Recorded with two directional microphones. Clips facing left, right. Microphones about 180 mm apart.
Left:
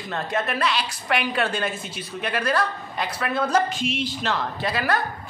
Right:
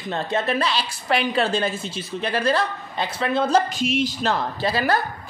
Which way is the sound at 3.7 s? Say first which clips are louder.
Right 4 dB; 45° right (ahead or behind).